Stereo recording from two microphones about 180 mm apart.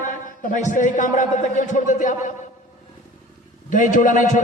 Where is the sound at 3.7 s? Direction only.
45° left (ahead or behind).